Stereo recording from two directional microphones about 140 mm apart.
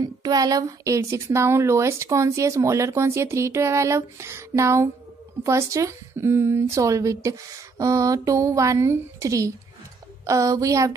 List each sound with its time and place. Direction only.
0.0 s speech: 25° right (ahead or behind)